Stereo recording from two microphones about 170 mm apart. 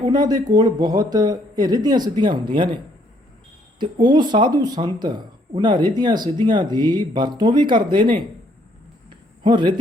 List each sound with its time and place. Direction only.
0.1 s speech: 25° right (ahead or behind)
3.8 s speech: 25° right (ahead or behind)
9.0 s a sound: 30° right (ahead or behind)